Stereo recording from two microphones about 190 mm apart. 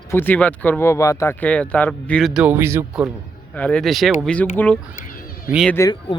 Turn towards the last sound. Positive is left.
turn(degrees=15)  # may be behind; listen again after turning